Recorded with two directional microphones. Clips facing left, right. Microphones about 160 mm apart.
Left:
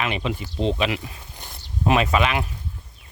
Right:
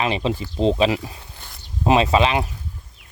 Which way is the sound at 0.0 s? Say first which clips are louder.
Right 4 dB; 30° right (ahead or behind).